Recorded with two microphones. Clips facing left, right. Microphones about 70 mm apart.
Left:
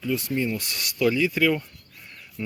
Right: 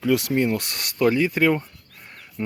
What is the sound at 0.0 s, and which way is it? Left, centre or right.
Speech, right.